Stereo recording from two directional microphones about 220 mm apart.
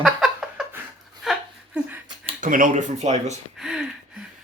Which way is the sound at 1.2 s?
5° right (ahead or behind).